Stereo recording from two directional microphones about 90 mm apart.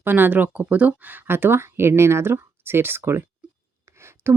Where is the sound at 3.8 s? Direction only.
30° right (ahead or behind).